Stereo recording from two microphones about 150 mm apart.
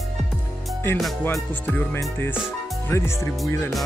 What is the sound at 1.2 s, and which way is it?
Speech, 15° left (ahead or behind).